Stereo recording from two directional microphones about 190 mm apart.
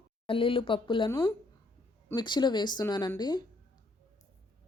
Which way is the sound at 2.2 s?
25° left (ahead or behind).